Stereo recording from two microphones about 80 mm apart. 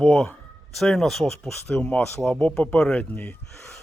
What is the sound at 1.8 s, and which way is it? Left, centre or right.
Speech, centre.